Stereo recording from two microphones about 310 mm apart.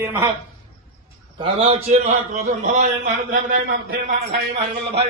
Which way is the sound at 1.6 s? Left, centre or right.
Right.